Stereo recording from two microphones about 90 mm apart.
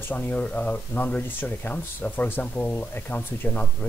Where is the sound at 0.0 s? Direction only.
20° left (ahead or behind).